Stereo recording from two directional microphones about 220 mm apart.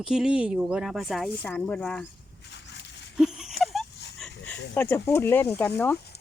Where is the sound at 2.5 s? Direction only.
50° left (ahead or behind).